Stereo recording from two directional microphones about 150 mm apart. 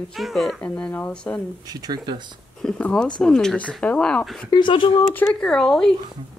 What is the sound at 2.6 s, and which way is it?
Speech, 5° left (ahead or behind).